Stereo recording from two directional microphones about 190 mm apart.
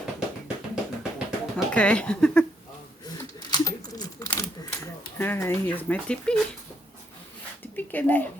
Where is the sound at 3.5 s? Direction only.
20° left (ahead or behind).